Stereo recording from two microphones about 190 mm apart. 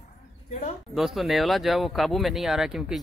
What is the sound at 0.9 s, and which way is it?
Speech, centre (ahead or behind).